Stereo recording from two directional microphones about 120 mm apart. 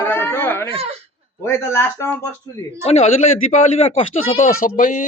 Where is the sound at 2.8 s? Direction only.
60° left (ahead or behind).